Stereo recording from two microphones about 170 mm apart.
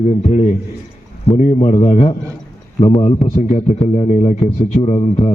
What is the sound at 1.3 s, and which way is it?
Speech, 35° left (ahead or behind).